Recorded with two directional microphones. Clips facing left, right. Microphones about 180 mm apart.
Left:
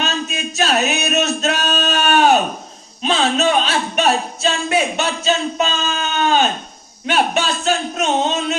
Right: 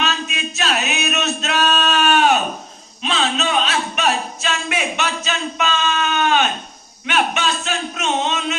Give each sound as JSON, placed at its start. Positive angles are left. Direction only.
{"t": 0.0, "sound": "male singing", "side_deg": 40}
{"t": 3.0, "sound": "speech", "side_deg": 40}